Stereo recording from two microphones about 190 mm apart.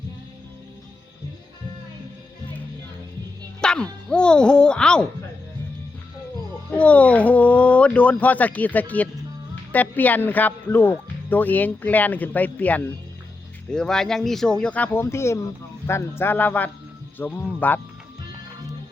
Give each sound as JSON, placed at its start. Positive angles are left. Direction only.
{"t": 3.6, "sound": "speech", "side_deg": 5}
{"t": 6.7, "sound": "speech", "side_deg": 5}